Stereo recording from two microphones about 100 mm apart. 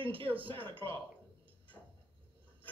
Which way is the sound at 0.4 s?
60° right (ahead or behind).